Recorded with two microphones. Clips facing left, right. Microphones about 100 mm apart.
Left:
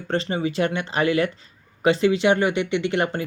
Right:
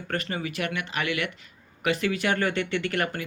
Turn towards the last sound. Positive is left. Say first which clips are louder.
# left 5 dB
turn(degrees=25)  # may be behind; listen again after turning